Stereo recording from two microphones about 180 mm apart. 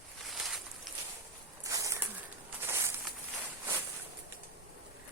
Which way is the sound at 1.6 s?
20° right (ahead or behind).